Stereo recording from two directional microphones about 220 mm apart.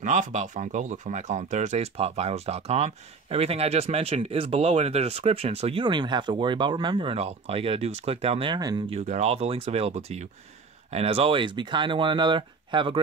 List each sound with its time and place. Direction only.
0.0 s speech: 35° right (ahead or behind); by 9.0 s 20° right (ahead or behind)
9.0 s speech: 30° right (ahead or behind)